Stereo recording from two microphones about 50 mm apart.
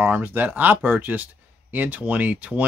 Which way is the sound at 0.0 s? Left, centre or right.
Right.